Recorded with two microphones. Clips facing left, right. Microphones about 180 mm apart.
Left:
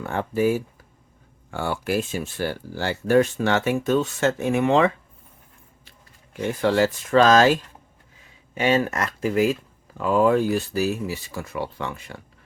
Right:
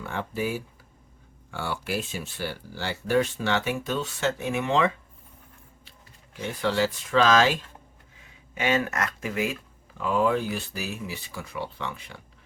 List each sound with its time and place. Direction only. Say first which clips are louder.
0.0 s speech: left 8 dB; 50° left (ahead or behind)
6.4 s speech: left 5 dB; 50° left (ahead or behind)
8.5 s speech: left 4 dB; 35° left (ahead or behind)